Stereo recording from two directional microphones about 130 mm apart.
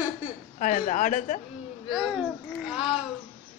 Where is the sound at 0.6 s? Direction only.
80° left.